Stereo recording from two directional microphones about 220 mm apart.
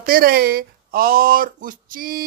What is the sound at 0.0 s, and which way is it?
Speech, 40° right (ahead or behind).